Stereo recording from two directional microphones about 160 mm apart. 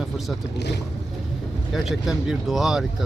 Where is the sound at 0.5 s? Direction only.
90° left.